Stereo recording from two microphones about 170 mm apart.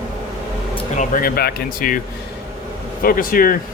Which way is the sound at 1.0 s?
55° left (ahead or behind).